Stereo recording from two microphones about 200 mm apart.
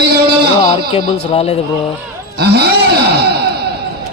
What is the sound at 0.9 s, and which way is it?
Speech, 30° left (ahead or behind).